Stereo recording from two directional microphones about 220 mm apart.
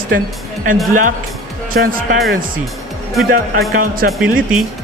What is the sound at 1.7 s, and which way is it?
Speech, 50° right (ahead or behind).